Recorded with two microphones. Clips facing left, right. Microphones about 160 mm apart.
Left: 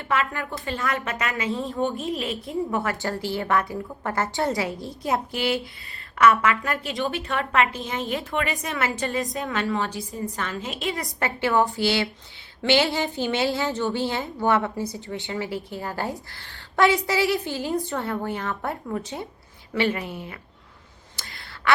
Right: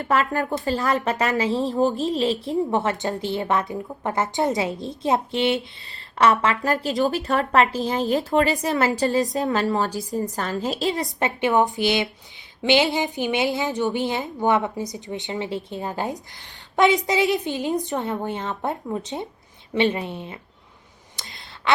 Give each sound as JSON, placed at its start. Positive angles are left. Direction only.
{"t": 0.0, "sound": "a woman's voice", "side_deg": -40}
{"t": 11.2, "sound": "a woman's voice", "side_deg": -20}
{"t": 21.2, "sound": "a sound", "side_deg": -20}